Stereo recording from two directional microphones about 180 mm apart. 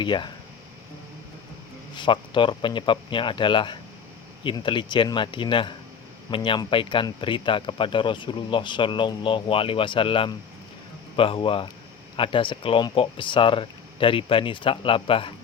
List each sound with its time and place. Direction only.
0.0 s speech: 25° left (ahead or behind)
2.0 s speech: 25° left (ahead or behind)